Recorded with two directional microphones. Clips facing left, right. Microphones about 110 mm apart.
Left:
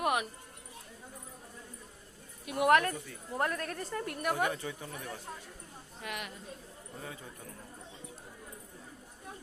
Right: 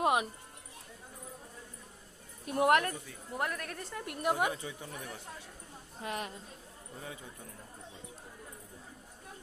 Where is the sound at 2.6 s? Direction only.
20° right (ahead or behind).